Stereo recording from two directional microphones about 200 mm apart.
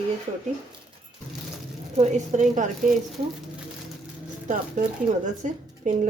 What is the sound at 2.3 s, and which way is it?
Speech, 35° right (ahead or behind).